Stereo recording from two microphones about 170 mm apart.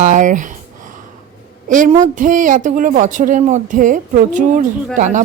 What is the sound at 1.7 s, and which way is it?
Speech, 45° right (ahead or behind).